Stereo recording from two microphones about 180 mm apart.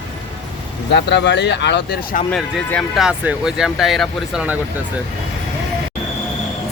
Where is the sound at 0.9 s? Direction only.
75° left (ahead or behind).